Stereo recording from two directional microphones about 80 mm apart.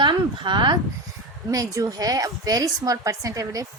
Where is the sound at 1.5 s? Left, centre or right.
Right.